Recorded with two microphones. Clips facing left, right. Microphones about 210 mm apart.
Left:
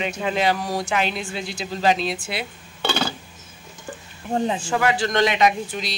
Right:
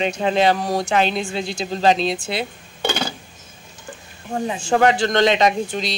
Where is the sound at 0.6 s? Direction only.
40° right (ahead or behind).